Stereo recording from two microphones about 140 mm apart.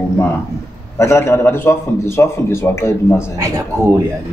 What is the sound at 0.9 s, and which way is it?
A man's voice, 20° left (ahead or behind).